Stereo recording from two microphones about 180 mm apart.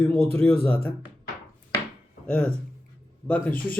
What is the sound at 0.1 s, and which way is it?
Speech, 10° left (ahead or behind).